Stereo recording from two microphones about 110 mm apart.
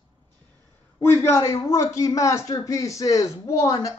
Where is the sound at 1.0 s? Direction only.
25° left (ahead or behind).